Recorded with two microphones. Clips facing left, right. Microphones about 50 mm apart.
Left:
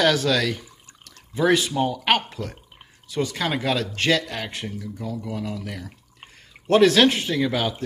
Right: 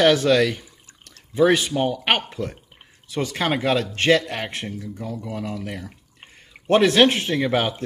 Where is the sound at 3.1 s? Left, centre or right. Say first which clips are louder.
Right 2 dB; right.